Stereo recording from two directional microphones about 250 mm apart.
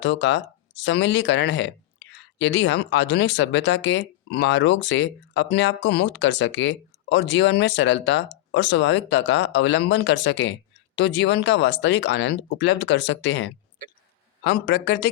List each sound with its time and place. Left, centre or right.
0.0 s a man's voice: left